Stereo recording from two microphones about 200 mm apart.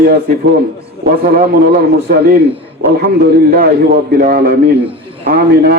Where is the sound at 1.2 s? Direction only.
50° right (ahead or behind).